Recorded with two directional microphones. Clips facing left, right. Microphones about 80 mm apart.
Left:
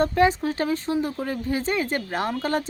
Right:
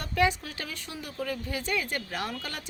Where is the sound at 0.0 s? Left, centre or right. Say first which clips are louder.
Left 7 dB; left.